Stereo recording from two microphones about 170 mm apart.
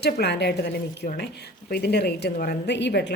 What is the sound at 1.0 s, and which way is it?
A woman's voice, 65° left (ahead or behind).